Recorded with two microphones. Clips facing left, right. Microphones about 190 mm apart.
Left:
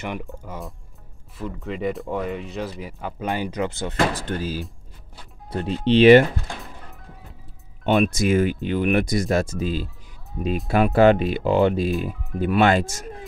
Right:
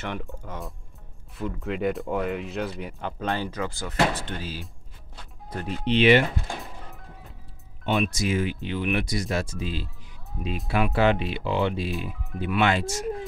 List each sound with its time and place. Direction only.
0.2 s speech: centre (ahead or behind)
3.3 s speech: 15° left (ahead or behind)
4.1 s speech: 40° left (ahead or behind)
5.5 s speech: 30° left (ahead or behind)
7.8 s speech: 50° left (ahead or behind)
11.9 s speech: centre (ahead or behind)
12.4 s speech: 45° left (ahead or behind)